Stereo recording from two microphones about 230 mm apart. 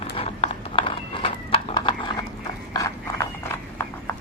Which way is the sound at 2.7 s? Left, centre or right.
Centre.